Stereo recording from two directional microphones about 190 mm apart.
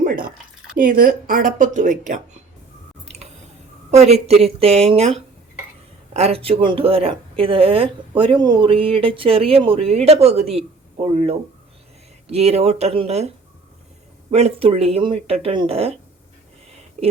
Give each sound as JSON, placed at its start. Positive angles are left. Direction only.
{"t": 0.8, "sound": "speech", "side_deg": -50}
{"t": 3.9, "sound": "a woman's voice", "side_deg": -35}